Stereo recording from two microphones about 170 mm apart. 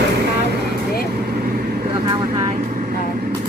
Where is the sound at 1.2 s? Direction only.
65° right (ahead or behind).